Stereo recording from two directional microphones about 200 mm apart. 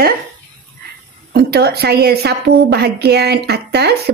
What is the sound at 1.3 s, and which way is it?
A woman's voice, 50° right (ahead or behind).